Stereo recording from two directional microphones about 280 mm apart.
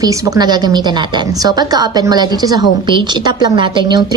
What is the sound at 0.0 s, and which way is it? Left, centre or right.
A woman's voice, centre.